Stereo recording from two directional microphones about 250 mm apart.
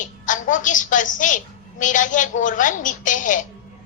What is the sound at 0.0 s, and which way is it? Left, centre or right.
A woman's voice, left.